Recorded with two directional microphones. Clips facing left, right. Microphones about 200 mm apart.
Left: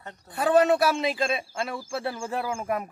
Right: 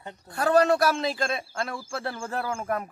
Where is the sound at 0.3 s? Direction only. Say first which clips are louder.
Left 1 dB; 5° left (ahead or behind).